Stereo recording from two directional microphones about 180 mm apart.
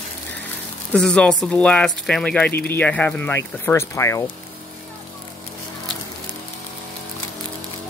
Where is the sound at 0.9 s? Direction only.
5° left (ahead or behind).